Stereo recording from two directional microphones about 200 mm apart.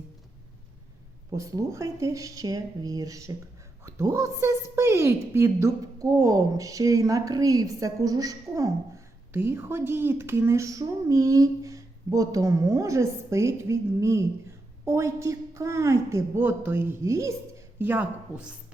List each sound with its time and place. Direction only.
1.4 s speech: 15° right (ahead or behind)